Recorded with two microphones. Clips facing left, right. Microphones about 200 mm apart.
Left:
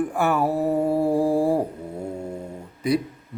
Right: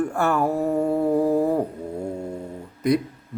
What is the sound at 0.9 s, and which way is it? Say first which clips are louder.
Music: even; 10° left (ahead or behind).